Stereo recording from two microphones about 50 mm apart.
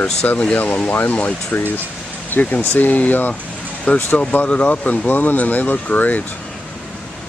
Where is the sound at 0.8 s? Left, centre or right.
Left.